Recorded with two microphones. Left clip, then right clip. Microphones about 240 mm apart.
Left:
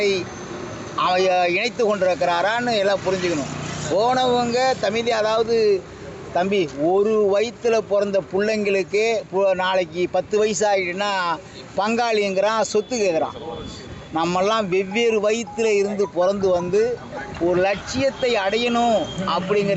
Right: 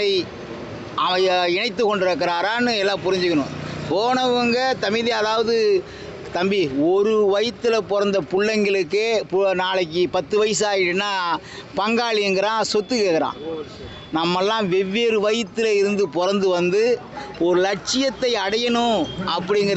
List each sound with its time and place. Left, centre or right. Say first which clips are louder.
0.0 s speech: even; right